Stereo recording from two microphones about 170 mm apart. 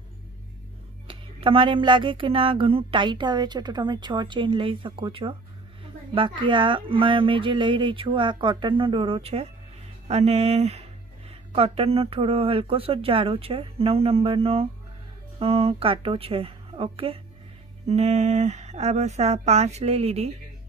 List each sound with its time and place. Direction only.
1.0 s speech: 30° right (ahead or behind)